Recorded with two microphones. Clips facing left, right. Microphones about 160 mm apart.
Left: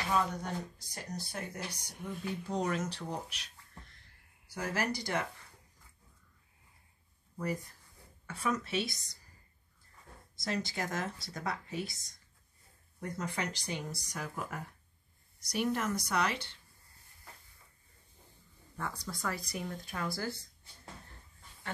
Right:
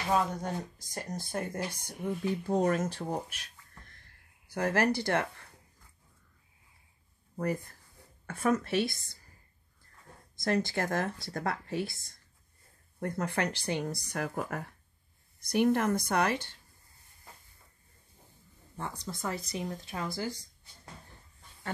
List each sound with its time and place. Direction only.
0.4 s speech: 45° right (ahead or behind)
8.3 s speech: 50° right (ahead or behind)
10.3 s speech: 55° right (ahead or behind)
13.0 s speech: 55° right (ahead or behind)
15.5 s speech: 55° right (ahead or behind)
18.8 s speech: 25° right (ahead or behind)